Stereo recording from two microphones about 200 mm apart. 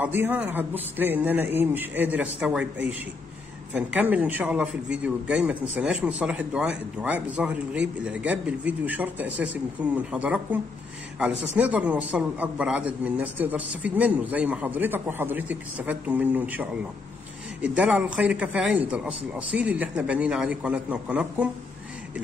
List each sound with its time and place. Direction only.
0.0 s a man's voice: 10° right (ahead or behind)